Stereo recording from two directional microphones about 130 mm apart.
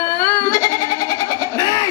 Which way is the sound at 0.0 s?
20° left (ahead or behind).